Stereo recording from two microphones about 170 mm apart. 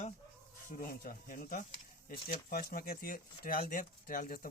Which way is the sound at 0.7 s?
55° left (ahead or behind).